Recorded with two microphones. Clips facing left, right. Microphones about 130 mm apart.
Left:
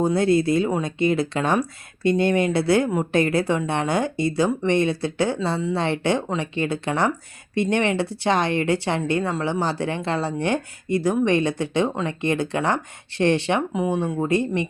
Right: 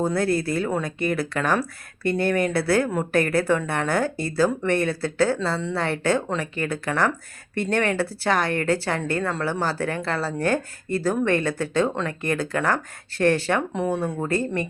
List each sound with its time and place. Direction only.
0.0 s speech: 20° left (ahead or behind)